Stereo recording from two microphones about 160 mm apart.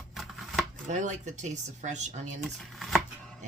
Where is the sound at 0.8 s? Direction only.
50° right (ahead or behind).